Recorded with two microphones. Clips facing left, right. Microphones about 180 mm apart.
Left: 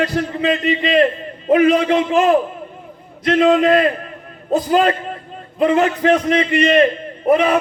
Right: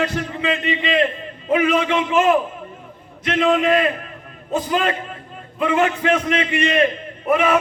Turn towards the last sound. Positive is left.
turn(degrees=35)  # may be behind; listen again after turning